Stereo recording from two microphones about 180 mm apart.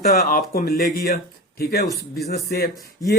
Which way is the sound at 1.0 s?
60° left (ahead or behind).